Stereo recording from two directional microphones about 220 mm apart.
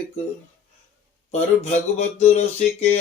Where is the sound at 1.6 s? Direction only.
30° left (ahead or behind).